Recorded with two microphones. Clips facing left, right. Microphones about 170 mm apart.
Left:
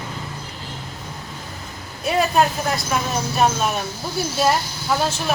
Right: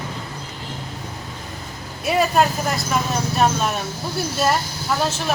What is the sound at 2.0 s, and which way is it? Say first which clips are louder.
A woman's voice: even; centre (ahead or behind).